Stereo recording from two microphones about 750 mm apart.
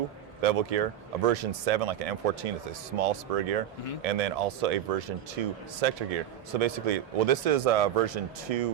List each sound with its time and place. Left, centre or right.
0.4 s speech: right